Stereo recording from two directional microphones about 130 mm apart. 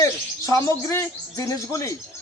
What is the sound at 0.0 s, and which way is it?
Bird, 25° left (ahead or behind).